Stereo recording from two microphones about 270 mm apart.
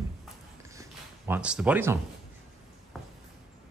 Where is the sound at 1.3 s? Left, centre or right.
Centre.